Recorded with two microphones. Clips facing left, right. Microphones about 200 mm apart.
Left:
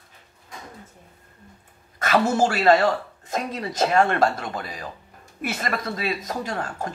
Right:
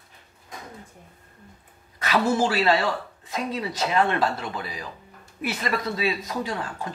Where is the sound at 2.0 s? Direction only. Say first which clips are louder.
Left 2 dB; 45° left (ahead or behind).